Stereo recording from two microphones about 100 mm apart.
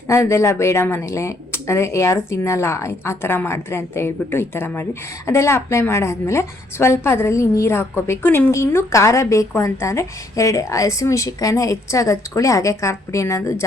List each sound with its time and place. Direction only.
0.1 s speech: 30° left (ahead or behind)